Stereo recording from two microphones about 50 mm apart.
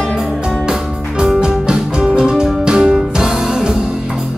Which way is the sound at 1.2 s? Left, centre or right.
Centre.